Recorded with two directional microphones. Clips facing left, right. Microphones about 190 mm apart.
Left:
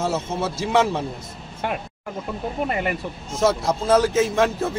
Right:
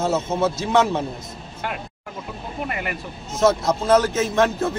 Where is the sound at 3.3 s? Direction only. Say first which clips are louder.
Right 2 dB; 10° left (ahead or behind).